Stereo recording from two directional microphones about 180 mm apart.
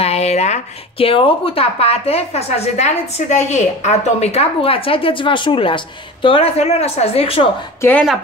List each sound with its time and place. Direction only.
0.0 s a woman's voice: 35° left (ahead or behind)